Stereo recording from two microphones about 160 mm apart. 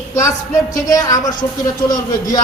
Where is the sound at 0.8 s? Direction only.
20° left (ahead or behind).